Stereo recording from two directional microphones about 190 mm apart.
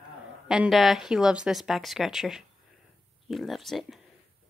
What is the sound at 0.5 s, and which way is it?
Speech, centre (ahead or behind).